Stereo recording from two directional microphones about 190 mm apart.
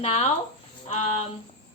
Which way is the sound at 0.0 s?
35° left (ahead or behind).